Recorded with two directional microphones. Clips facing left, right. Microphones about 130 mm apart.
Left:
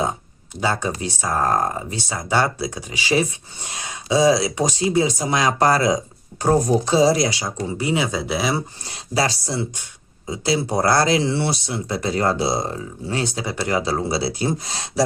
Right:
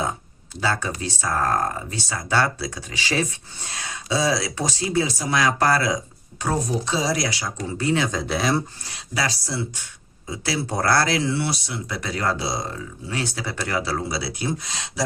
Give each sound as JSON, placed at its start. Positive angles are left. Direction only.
{"t": 0.6, "sound": "speech", "side_deg": 20}
{"t": 6.4, "sound": "speech", "side_deg": 40}
{"t": 7.1, "sound": "speech", "side_deg": 25}
{"t": 8.8, "sound": "speech", "side_deg": 30}
{"t": 13.2, "sound": "speech", "side_deg": 20}